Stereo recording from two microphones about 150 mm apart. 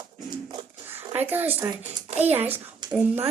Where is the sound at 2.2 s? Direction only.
15° right (ahead or behind).